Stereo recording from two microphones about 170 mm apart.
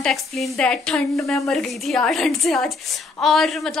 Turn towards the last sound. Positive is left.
turn(degrees=0)  # may be behind; listen again after turning